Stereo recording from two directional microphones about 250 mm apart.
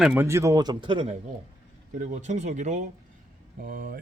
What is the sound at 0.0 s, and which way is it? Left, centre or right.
A man's voice, centre.